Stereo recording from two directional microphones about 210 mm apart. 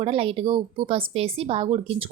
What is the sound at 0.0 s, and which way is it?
A woman's voice, 25° right (ahead or behind).